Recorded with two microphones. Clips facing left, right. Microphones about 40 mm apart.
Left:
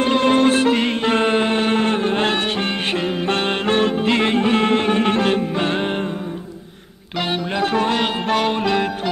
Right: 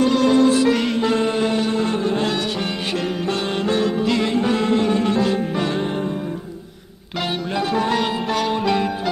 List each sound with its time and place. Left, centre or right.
0.0 s music: left
7.2 s music: left
7.6 s music: left